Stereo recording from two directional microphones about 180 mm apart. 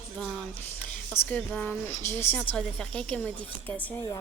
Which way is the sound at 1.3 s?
10° left (ahead or behind).